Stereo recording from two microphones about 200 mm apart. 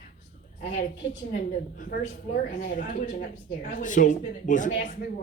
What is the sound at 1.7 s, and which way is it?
Speech, 45° left (ahead or behind).